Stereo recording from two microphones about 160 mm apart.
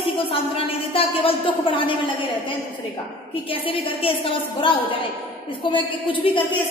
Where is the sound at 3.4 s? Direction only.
35° left (ahead or behind).